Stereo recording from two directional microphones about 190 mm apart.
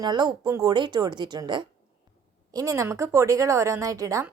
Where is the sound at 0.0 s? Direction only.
20° right (ahead or behind).